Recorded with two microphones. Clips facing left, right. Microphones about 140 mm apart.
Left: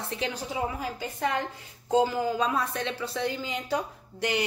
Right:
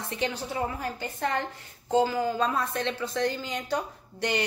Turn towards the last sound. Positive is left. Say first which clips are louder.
# even
turn(degrees=5)  # may be behind; listen again after turning